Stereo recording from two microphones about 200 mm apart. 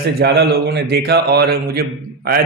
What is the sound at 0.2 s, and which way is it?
Speech, 55° right (ahead or behind).